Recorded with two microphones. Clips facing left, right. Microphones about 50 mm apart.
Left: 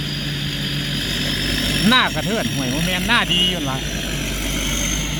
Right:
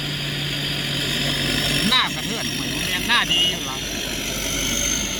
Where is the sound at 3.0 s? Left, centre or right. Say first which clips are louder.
Left 1 dB; centre.